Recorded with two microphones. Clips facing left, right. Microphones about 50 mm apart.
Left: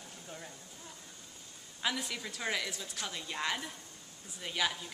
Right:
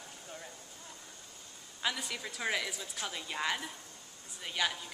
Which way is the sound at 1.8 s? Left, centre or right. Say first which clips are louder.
Even; centre.